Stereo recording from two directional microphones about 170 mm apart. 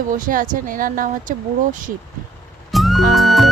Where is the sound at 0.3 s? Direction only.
55° right (ahead or behind).